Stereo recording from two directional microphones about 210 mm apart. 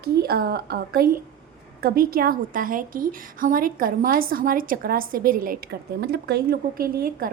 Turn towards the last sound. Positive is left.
turn(degrees=-45)  # may be behind; listen again after turning